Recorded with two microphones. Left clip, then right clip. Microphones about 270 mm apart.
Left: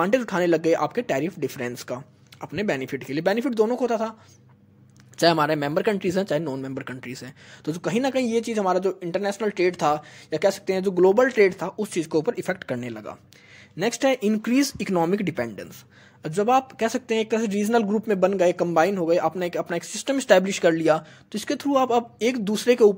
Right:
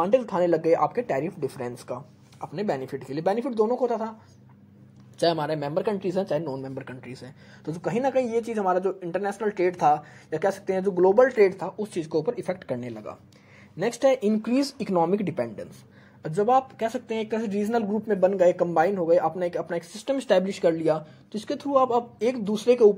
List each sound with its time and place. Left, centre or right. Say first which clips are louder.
0.0 s speech: even; left
5.1 s speech: left 5 dB; left